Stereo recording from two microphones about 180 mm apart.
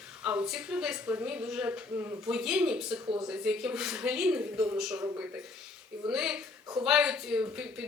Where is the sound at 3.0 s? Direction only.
25° right (ahead or behind).